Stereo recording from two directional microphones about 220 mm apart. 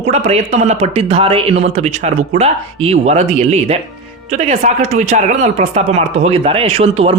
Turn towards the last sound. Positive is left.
turn(degrees=-25)  # may be behind; listen again after turning